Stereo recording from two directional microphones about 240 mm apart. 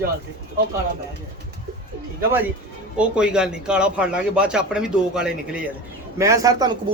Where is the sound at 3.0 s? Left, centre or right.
Centre.